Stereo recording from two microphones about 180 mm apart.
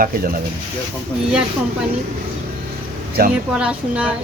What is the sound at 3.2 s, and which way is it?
Speech, 55° right (ahead or behind).